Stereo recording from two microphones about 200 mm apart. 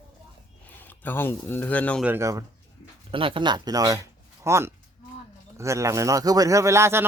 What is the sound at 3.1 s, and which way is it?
Speech, 25° right (ahead or behind).